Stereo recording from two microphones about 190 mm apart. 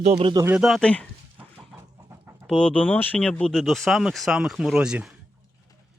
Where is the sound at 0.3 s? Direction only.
10° right (ahead or behind).